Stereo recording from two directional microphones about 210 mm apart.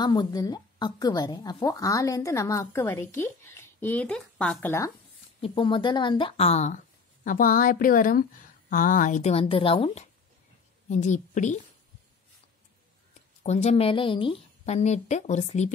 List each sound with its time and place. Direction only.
0.0 s speech: 20° left (ahead or behind)
5.4 s a woman's voice: 25° left (ahead or behind)
13.1 s a woman's voice: 30° left (ahead or behind)